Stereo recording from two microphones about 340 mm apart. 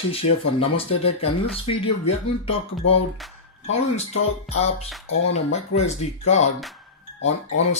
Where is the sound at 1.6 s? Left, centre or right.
Centre.